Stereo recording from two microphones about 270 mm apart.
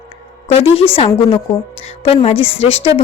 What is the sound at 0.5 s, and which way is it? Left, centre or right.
A woman's voice, left.